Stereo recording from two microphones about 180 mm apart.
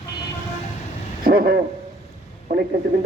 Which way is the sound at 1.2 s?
55° right (ahead or behind).